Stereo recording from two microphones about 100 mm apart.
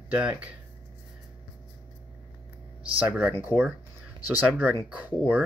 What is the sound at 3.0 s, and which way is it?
Speech, 15° right (ahead or behind).